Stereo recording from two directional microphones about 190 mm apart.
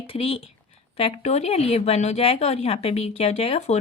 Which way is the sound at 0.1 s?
30° left (ahead or behind).